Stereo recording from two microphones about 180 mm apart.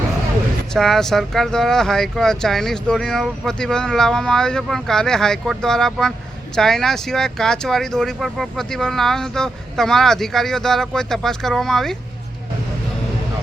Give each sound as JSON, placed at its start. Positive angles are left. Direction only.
{"t": 0.7, "sound": "speech", "side_deg": 5}